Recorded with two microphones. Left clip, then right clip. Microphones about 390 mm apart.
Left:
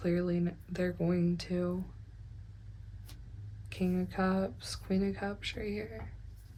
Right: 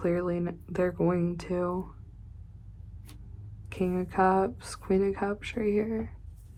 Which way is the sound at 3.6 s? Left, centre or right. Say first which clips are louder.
Right 5 dB; centre.